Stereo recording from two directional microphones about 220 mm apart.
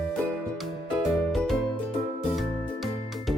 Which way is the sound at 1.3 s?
Centre (ahead or behind).